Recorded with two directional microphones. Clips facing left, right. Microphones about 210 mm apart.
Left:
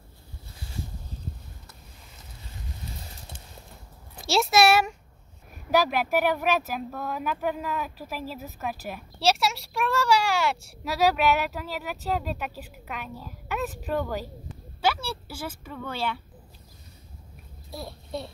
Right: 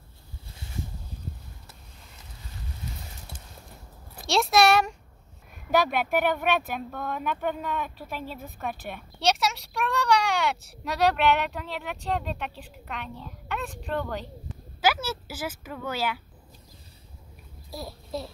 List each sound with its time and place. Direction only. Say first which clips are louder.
4.2 s a sound: even; centre (ahead or behind)
5.7 s speech: left 1 dB; centre (ahead or behind)
14.9 s speech: right 1 dB; 5° right (ahead or behind)
17.6 s a child's voice: even; centre (ahead or behind)